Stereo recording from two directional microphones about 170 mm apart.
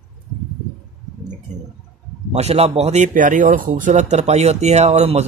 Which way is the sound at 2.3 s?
35° right (ahead or behind).